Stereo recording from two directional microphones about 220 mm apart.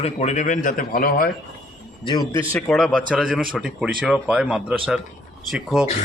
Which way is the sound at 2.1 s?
15° left (ahead or behind).